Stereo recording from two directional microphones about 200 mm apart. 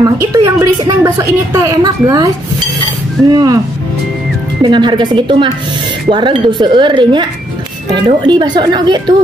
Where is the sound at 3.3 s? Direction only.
20° right (ahead or behind).